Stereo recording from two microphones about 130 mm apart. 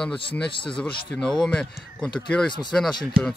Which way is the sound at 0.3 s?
40° left (ahead or behind).